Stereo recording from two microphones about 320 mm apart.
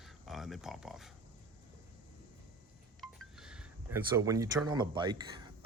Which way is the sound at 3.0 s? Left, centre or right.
Centre.